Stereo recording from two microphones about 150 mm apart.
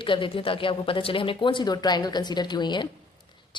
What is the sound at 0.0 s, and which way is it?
A woman's voice, 35° left (ahead or behind).